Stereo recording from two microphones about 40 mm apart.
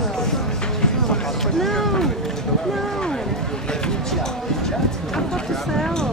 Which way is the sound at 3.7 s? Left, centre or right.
Centre.